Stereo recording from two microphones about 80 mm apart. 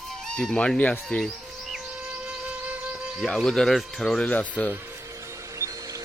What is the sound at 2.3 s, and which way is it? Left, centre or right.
Music, centre.